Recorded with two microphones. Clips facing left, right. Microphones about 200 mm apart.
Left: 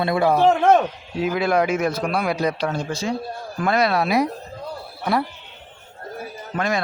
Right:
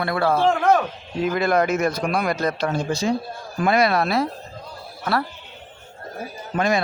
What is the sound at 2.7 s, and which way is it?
Speech, 15° right (ahead or behind).